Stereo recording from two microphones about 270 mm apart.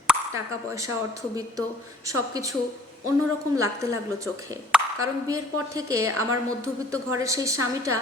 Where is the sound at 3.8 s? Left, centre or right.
Centre.